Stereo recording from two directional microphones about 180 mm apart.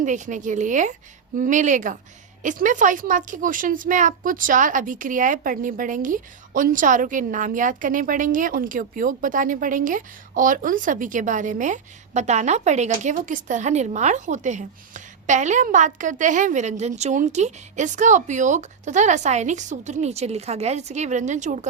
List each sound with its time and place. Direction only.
0.0 s speech: 45° right (ahead or behind)